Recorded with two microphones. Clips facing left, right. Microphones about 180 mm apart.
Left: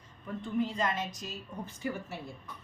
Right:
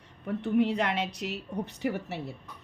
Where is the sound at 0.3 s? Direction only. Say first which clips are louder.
Right 7 dB; 70° right (ahead or behind).